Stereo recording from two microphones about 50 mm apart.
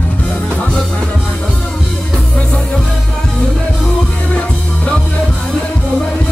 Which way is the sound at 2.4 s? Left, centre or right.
Centre.